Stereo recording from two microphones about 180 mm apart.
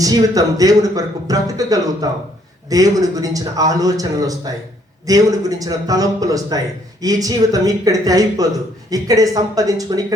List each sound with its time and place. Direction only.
0.0 s speech: 20° right (ahead or behind)